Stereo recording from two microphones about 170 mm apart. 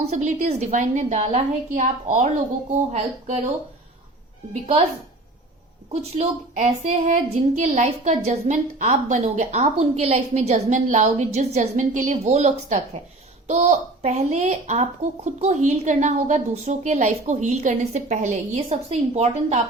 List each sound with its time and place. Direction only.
0.0 s a woman's voice: 45° right (ahead or behind)
5.9 s a woman's voice: 40° right (ahead or behind)